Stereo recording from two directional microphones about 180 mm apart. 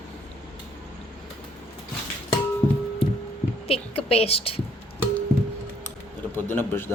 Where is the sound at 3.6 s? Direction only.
35° left (ahead or behind).